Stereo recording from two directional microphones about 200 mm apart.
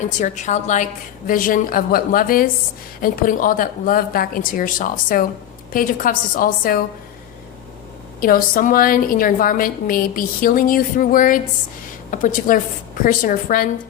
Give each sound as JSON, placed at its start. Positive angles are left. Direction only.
{"t": 0.2, "sound": "a woman's voice", "side_deg": 35}
{"t": 8.2, "sound": "a woman's voice", "side_deg": 45}